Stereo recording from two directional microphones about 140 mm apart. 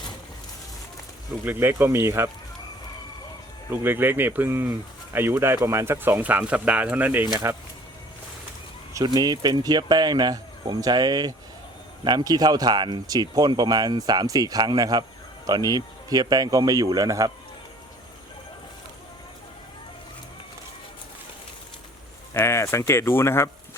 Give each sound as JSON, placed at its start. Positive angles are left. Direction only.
{"t": 1.5, "sound": "speech", "side_deg": -15}
{"t": 3.7, "sound": "speech", "side_deg": -15}
{"t": 8.9, "sound": "speech", "side_deg": -25}
{"t": 22.3, "sound": "speech", "side_deg": 20}